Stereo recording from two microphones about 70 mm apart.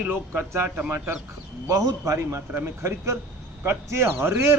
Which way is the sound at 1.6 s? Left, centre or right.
Right.